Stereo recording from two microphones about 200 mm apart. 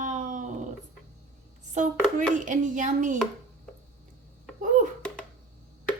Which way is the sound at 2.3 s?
40° right (ahead or behind).